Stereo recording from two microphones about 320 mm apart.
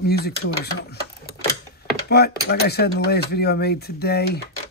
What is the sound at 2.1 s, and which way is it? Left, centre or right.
Speech, left.